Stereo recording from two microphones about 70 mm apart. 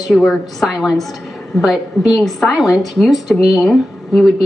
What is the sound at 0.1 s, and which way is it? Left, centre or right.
Speech, centre.